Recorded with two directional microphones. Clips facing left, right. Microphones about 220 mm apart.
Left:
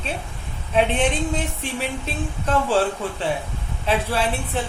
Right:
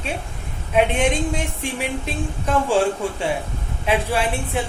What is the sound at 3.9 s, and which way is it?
Speech, 15° right (ahead or behind).